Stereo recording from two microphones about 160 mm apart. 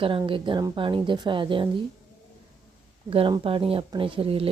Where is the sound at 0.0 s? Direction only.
35° right (ahead or behind).